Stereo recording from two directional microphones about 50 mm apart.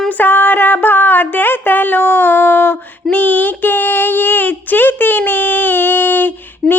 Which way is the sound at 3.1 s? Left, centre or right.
Left.